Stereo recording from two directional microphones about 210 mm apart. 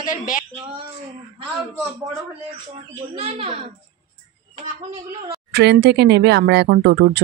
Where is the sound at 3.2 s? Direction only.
30° right (ahead or behind).